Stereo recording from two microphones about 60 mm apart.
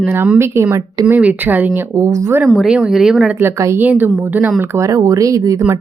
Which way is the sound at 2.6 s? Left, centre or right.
Centre.